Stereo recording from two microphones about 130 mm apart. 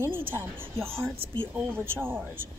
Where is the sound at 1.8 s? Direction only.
15° right (ahead or behind).